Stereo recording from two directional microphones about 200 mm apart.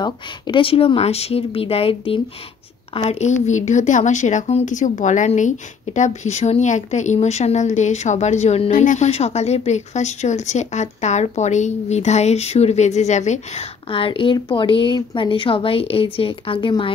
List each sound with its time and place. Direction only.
0.0 s speech: 25° left (ahead or behind)